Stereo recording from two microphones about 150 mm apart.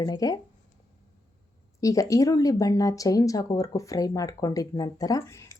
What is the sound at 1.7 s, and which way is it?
Speech, 20° left (ahead or behind).